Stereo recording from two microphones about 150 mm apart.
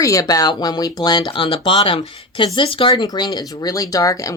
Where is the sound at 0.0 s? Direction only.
20° left (ahead or behind).